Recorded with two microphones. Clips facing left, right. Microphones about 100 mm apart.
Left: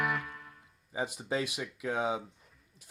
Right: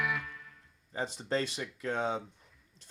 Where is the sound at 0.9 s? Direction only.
10° left (ahead or behind).